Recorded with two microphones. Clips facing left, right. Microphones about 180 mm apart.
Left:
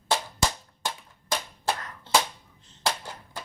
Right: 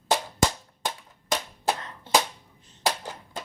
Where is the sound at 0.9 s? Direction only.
20° right (ahead or behind).